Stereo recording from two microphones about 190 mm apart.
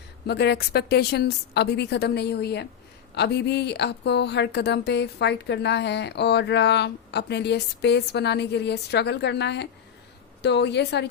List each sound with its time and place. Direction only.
0.3 s speech: 60° left (ahead or behind)